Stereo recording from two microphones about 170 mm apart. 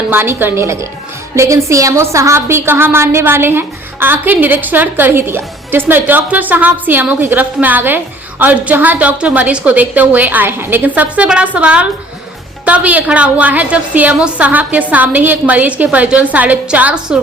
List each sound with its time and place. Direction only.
0.1 s a woman's voice: 15° right (ahead or behind)